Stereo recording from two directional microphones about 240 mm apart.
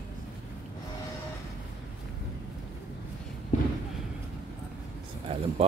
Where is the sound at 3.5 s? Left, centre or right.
Left.